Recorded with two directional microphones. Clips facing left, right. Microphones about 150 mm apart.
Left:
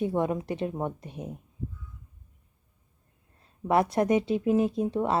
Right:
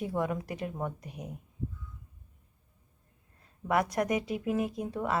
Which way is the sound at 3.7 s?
25° left (ahead or behind).